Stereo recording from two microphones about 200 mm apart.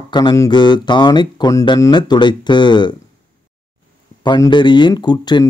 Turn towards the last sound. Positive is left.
turn(degrees=20)  # may be behind; listen again after turning